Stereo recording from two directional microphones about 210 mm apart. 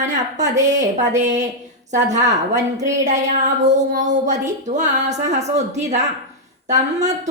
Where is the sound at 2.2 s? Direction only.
15° right (ahead or behind).